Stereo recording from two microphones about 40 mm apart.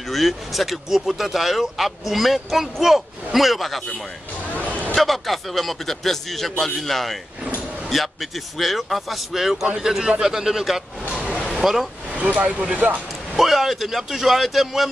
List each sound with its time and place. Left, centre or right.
0.1 s speech: centre
4.9 s a man's voice: centre
12.1 s vehicle: right
13.3 s speech: centre